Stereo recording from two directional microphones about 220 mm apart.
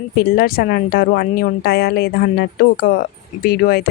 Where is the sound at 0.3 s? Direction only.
45° left (ahead or behind).